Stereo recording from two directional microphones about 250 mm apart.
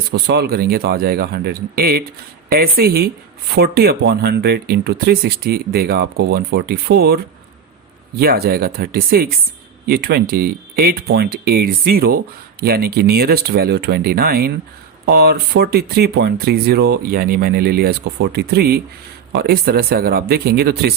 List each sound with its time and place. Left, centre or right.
0.1 s speech: right
8.2 s speech: right